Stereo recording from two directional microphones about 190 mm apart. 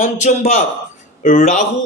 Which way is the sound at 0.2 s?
40° left (ahead or behind).